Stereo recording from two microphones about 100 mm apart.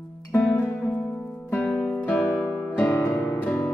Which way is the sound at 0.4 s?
15° left (ahead or behind).